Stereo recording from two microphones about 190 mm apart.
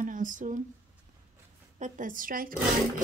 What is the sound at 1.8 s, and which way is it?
Speech, 45° right (ahead or behind).